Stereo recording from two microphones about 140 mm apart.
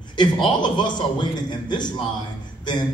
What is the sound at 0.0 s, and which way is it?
A man's voice, 35° left (ahead or behind).